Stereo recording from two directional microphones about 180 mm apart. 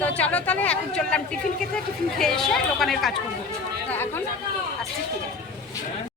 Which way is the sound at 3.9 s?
10° left (ahead or behind).